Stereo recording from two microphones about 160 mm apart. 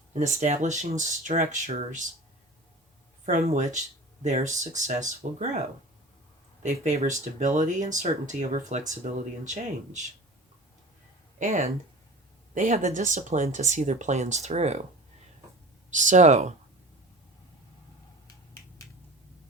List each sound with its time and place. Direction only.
0.1 s speech: 45° right (ahead or behind)
3.2 s speech: 50° right (ahead or behind)
6.6 s speech: 50° right (ahead or behind)
11.3 s speech: 50° right (ahead or behind)
15.9 s speech: 50° right (ahead or behind)